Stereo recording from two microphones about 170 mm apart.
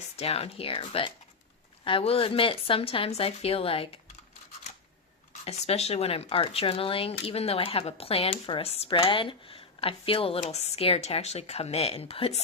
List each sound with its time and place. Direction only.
0.2 s speech: 35° left (ahead or behind)
5.5 s speech: 40° left (ahead or behind)